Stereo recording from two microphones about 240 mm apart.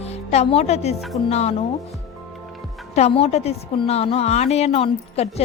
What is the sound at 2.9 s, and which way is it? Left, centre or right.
A woman's voice, left.